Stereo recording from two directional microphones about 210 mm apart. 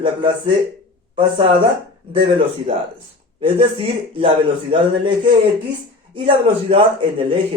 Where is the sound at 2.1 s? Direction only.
25° right (ahead or behind).